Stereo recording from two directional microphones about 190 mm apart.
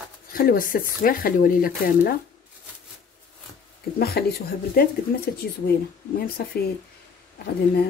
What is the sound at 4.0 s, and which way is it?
Speech, 55° left (ahead or behind).